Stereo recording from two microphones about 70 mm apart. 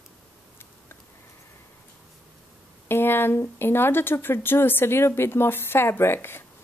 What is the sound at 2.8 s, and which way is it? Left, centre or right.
A woman's voice, left.